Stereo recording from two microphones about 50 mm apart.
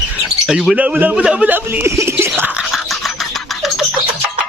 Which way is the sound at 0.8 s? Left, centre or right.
Right.